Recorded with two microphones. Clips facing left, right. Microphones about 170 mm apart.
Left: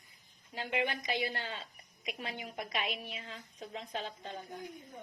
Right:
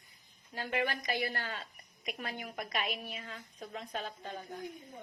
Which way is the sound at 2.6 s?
25° left (ahead or behind).